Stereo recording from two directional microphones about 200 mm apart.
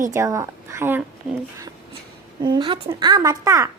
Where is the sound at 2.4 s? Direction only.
25° right (ahead or behind).